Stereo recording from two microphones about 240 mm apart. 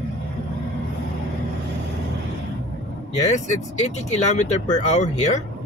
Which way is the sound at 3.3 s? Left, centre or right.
Left.